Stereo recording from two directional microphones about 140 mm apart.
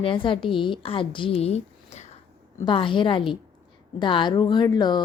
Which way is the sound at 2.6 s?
35° left (ahead or behind).